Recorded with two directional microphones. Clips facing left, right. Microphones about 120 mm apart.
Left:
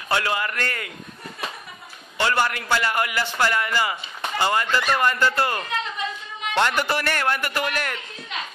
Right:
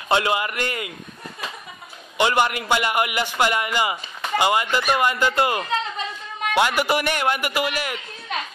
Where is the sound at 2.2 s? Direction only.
20° right (ahead or behind).